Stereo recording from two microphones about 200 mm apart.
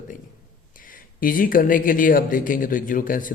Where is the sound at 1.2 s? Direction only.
45° left (ahead or behind).